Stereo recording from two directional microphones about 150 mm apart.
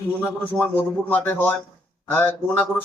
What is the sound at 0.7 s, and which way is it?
Speech, 10° left (ahead or behind).